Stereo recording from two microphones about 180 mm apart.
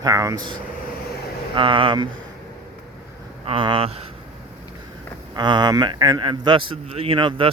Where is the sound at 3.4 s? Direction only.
30° right (ahead or behind).